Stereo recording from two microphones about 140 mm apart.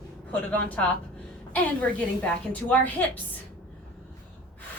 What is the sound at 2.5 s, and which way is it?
Speech, 10° left (ahead or behind).